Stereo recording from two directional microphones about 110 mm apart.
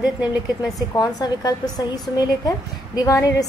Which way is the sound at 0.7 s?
35° left (ahead or behind).